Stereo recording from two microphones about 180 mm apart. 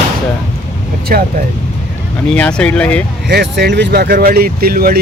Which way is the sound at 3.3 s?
70° right (ahead or behind).